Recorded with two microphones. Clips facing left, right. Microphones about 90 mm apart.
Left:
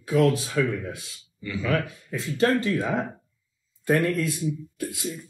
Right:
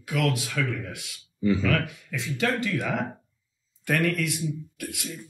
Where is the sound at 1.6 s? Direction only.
35° left (ahead or behind).